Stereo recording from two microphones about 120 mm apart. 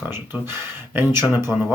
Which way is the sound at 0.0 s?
15° right (ahead or behind).